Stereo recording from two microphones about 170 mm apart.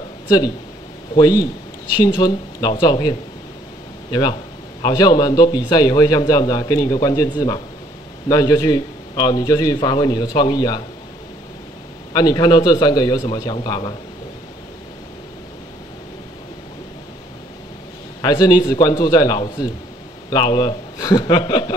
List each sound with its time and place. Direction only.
1.1 s a man's voice: 25° left (ahead or behind)
12.1 s a man's voice: 25° left (ahead or behind)
18.2 s a man's voice: 25° left (ahead or behind)